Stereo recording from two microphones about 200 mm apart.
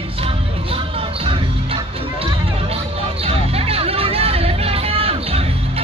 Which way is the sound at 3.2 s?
30° right (ahead or behind).